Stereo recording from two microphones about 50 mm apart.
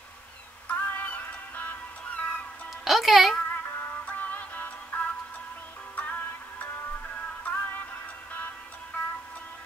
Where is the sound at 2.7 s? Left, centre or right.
Centre.